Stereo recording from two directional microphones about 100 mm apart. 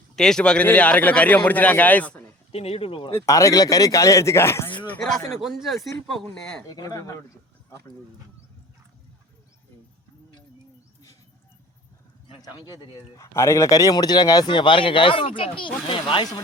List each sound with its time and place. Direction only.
0.2 s a man's voice: 5° left (ahead or behind)
2.5 s speech: 85° left; by 3.1 s 65° left (ahead or behind)
3.2 s speech: 35° left (ahead or behind)
4.9 s a man's voice: 5° left (ahead or behind)
6.7 s speech: 40° left (ahead or behind)
12.4 s speech: 40° left (ahead or behind)
13.1 s speech: 30° left (ahead or behind); by 16.2 s 55° left (ahead or behind)